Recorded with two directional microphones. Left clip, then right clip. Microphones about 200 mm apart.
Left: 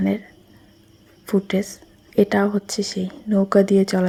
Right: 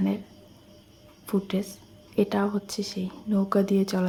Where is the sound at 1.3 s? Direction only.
20° left (ahead or behind).